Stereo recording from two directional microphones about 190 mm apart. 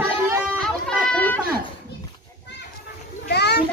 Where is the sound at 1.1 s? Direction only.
10° left (ahead or behind).